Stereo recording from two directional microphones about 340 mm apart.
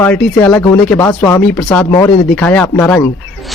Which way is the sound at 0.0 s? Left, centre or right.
Centre.